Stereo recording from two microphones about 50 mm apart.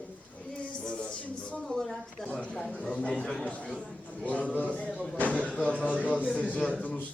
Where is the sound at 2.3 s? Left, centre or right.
Centre.